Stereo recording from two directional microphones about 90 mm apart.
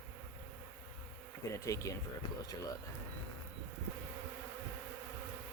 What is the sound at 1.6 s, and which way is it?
Speech, 35° left (ahead or behind).